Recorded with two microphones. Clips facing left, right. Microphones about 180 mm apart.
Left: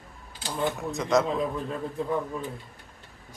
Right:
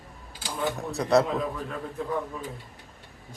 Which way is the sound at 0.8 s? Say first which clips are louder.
Right 4 dB; 35° right (ahead or behind).